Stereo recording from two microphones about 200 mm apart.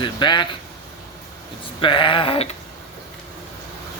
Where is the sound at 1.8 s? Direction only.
25° left (ahead or behind).